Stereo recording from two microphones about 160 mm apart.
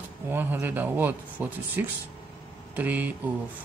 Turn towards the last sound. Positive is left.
turn(degrees=-10)  # may be behind; listen again after turning